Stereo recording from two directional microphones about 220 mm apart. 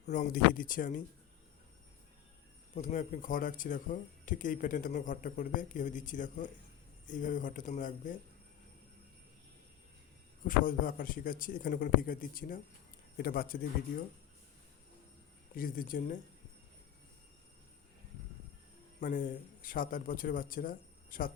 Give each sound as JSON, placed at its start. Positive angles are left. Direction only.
{"t": 0.0, "sound": "speech", "side_deg": 35}
{"t": 2.7, "sound": "speech", "side_deg": 35}
{"t": 10.4, "sound": "a man's voice", "side_deg": 40}
{"t": 15.5, "sound": "speech", "side_deg": 40}
{"t": 18.9, "sound": "speech", "side_deg": 35}